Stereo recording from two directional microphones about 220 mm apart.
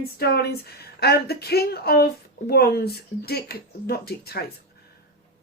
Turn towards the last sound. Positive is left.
turn(degrees=45)  # may be behind; listen again after turning